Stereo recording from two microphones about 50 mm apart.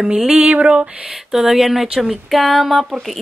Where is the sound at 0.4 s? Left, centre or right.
Right.